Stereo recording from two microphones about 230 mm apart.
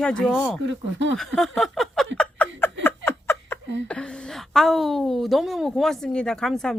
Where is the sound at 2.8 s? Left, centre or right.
Centre.